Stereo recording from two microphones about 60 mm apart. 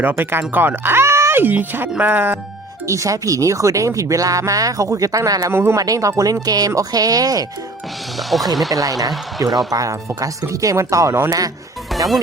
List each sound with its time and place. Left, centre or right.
0.0 s speech: right
2.8 s speech: right
5.5 s speech: right
5.7 s speech: right
6.4 s speech: right
8.1 s speech: centre
8.7 s speech: right
9.6 s speech: right
11.3 s speech: right
11.9 s music: centre